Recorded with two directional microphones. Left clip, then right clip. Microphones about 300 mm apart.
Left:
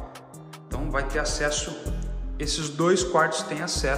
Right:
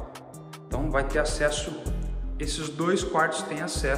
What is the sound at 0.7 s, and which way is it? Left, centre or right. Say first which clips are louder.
A man's voice: right 2 dB; centre.